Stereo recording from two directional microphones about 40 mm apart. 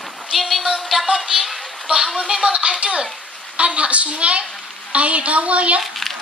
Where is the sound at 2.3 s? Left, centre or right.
Centre.